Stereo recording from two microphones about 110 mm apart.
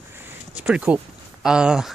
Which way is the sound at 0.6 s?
10° right (ahead or behind).